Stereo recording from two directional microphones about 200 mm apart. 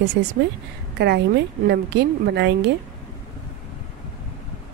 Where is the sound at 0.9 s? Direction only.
60° right (ahead or behind).